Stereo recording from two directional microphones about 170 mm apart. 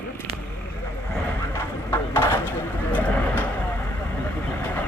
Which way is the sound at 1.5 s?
15° left (ahead or behind).